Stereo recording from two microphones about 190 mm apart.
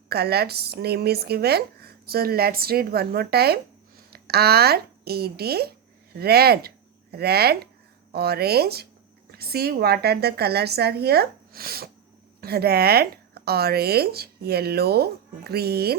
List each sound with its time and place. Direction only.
0.1 s speech: 55° right (ahead or behind)